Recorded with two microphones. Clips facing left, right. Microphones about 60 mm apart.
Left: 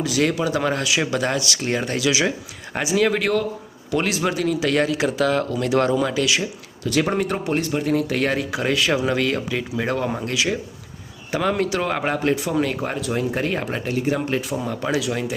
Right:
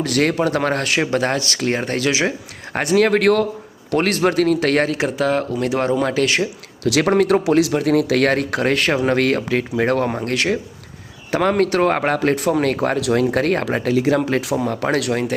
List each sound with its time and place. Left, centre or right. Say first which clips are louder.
0.0 s speech: right 3 dB; right
2.7 s a man's voice: right 4 dB; right
3.9 s speech: right 5 dB; right
4.9 s speech: right 1 dB; right
6.0 s speech: right 3 dB; right
6.8 s a man's voice: right 5 dB; right
14.5 s a man's voice: right 4 dB; right